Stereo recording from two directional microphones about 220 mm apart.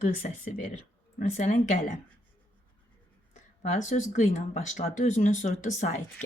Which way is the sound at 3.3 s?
35° left (ahead or behind).